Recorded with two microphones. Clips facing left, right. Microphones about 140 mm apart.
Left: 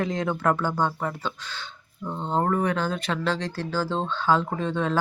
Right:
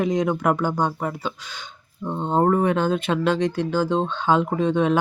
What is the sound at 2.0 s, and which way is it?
Speech, 25° right (ahead or behind).